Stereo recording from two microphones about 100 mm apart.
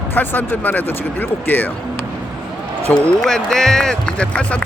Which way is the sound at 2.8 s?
10° left (ahead or behind).